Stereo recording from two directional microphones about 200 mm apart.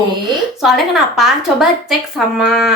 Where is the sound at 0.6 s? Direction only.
Centre (ahead or behind).